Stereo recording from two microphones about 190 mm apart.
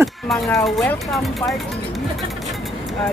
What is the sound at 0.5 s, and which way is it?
Speech, 5° left (ahead or behind).